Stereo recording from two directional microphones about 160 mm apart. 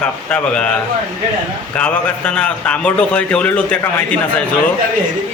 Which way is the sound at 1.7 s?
5° left (ahead or behind).